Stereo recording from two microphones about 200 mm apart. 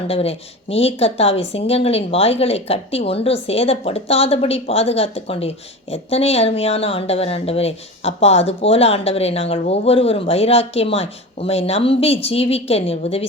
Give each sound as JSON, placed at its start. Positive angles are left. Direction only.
{"t": 0.1, "sound": "speech", "side_deg": 30}